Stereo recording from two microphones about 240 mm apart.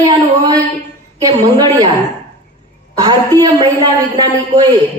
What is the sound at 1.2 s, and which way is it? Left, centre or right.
Speech, centre.